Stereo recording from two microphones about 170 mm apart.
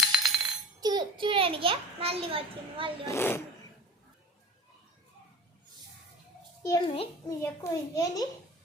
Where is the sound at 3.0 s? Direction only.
15° left (ahead or behind).